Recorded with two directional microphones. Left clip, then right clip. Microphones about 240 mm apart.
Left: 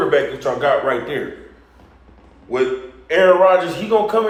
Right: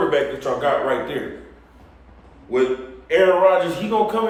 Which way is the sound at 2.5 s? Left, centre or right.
Centre.